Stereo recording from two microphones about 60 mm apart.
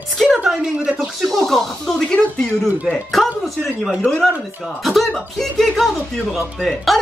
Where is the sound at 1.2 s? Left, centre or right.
Centre.